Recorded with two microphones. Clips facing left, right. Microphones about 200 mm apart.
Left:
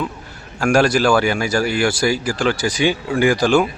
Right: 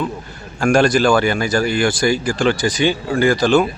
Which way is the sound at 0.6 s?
5° left (ahead or behind).